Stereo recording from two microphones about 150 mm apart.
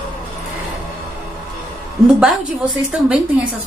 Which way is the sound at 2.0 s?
5° right (ahead or behind).